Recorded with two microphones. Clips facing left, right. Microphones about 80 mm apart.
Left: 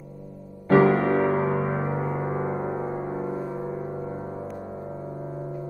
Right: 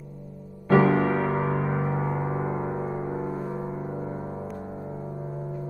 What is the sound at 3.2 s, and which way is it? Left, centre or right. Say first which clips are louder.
Gong: left 1 dB; centre.